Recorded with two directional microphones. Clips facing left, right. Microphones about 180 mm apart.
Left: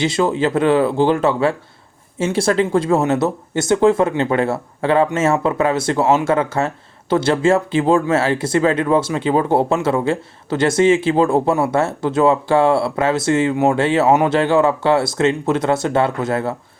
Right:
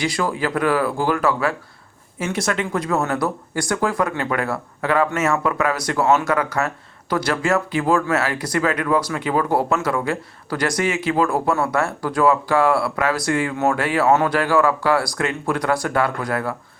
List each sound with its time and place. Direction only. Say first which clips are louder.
0.0 s speech: left 5 dB; 25° left (ahead or behind)